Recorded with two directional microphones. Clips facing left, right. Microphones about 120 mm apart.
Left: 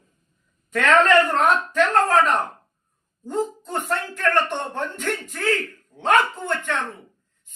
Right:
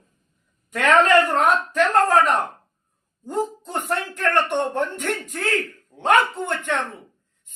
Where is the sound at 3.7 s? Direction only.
15° right (ahead or behind).